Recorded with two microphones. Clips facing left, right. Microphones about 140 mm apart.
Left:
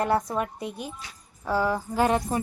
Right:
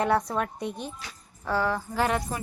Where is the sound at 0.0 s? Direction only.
Centre (ahead or behind).